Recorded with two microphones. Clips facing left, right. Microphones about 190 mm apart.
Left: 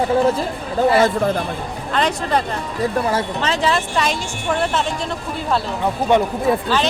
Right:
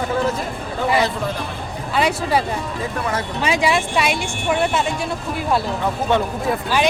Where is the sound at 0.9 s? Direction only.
45° left (ahead or behind).